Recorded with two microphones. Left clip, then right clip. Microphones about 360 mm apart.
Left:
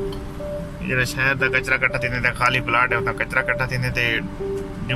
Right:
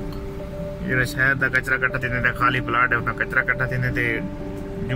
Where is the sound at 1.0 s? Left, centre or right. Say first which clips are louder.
Even; centre.